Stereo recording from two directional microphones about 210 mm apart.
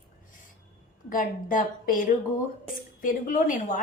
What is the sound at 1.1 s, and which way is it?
A woman's voice, 40° left (ahead or behind).